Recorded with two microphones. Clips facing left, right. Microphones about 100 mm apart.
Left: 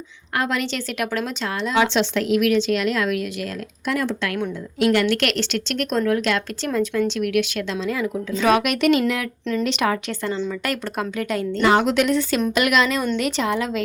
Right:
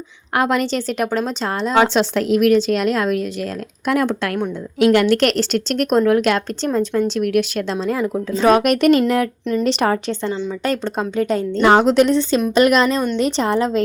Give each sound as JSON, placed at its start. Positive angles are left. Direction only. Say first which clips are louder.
{"t": 0.3, "sound": "speech", "louder": "right 6 dB", "side_deg": -50}
{"t": 0.6, "sound": "speech", "louder": "right 5 dB", "side_deg": -35}
{"t": 3.8, "sound": "speech", "louder": "right 5 dB", "side_deg": -50}
{"t": 7.2, "sound": "speech", "louder": "right 3 dB", "side_deg": -40}
{"t": 11.6, "sound": "speech", "louder": "right 5 dB", "side_deg": -45}